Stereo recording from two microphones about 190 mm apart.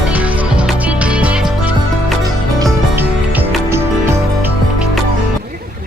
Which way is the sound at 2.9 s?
10° right (ahead or behind).